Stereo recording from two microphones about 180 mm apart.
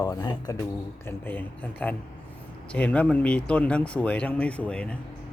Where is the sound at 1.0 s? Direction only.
10° left (ahead or behind).